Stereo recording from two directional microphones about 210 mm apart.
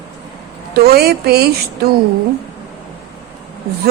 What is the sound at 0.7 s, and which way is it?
Speech, 50° right (ahead or behind).